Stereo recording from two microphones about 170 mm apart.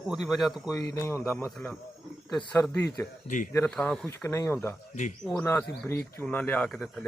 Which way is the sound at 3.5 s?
10° left (ahead or behind).